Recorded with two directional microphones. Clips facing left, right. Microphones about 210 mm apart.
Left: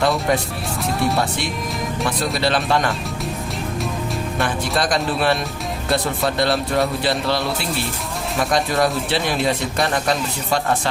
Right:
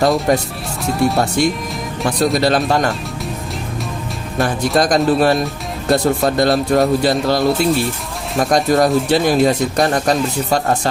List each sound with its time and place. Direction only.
0.0 s a man's voice: 40° right (ahead or behind)
2.0 s a man's voice: 40° right (ahead or behind)
4.4 s a man's voice: 40° right (ahead or behind)